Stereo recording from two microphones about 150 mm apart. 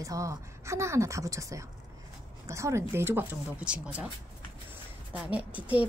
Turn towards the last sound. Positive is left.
turn(degrees=-10)  # may be behind; listen again after turning